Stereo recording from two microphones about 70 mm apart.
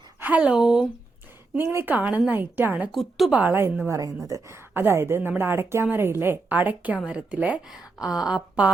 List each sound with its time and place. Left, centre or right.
0.2 s speech: right
0.5 s speech: centre
1.5 s a woman's voice: right
2.9 s speech: centre
3.5 s speech: right
3.9 s speech: right
4.5 s a woman's voice: right
7.7 s speech: centre